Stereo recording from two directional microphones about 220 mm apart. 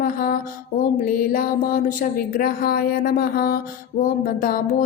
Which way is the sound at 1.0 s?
40° left (ahead or behind).